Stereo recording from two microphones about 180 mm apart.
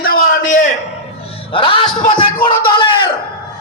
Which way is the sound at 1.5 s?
30° left (ahead or behind).